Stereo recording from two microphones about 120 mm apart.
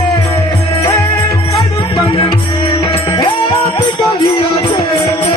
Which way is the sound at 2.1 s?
55° left (ahead or behind).